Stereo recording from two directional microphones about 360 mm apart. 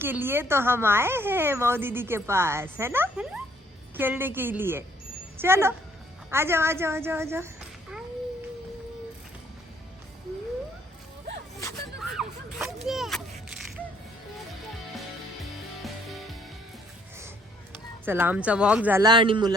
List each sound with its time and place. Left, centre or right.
0.0 s a child's voice: centre
11.6 s a sound: centre
15.8 s music: centre
18.0 s speech: centre